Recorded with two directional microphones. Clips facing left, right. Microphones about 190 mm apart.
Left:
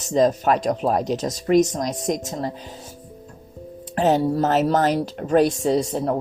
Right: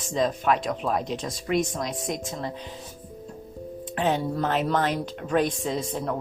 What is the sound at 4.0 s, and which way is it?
A woman's voice, 40° left (ahead or behind).